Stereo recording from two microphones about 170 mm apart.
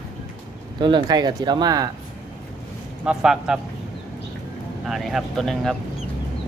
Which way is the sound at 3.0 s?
5° right (ahead or behind).